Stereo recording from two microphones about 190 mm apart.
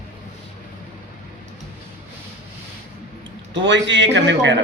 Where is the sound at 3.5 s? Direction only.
70° right (ahead or behind).